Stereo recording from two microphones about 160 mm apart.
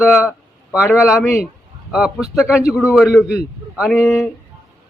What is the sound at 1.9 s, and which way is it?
A man's voice, 5° right (ahead or behind).